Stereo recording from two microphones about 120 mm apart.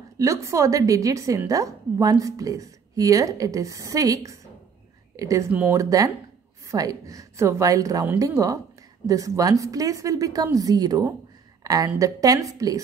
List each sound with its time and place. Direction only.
0.2 s a woman's voice: 25° right (ahead or behind)
5.5 s speech: 15° right (ahead or behind)
5.8 s a woman's voice: 30° right (ahead or behind)